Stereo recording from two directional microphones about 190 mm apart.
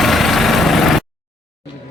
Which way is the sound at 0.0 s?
Centre (ahead or behind).